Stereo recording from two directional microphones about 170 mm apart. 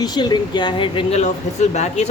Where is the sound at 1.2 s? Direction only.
45° left (ahead or behind).